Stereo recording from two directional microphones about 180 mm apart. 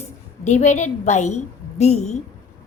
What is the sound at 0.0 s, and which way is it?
A woman's voice, 40° left (ahead or behind).